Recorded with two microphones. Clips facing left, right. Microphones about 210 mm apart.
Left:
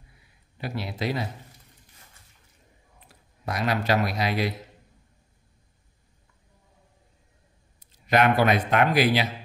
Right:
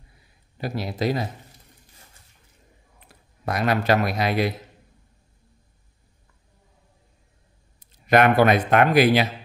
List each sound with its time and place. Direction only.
0.6 s speech: 40° right (ahead or behind)
3.4 s speech: 55° right (ahead or behind)
8.1 s speech: 55° right (ahead or behind)